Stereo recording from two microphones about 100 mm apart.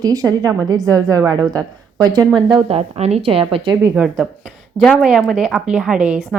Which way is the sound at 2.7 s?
90° right.